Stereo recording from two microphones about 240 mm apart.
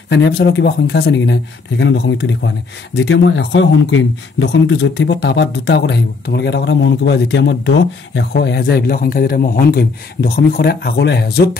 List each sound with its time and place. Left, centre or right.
0.1 s speech: left